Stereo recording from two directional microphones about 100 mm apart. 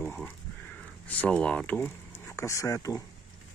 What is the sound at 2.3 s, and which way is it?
Speech, 30° left (ahead or behind).